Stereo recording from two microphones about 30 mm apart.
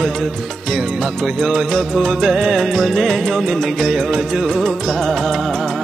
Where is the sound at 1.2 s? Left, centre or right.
Centre.